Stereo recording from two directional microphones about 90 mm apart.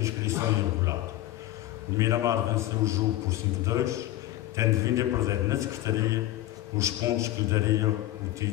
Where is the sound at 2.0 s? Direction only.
35° right (ahead or behind).